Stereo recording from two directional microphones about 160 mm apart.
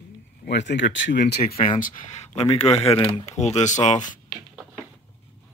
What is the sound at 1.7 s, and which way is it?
Speech, 55° left (ahead or behind).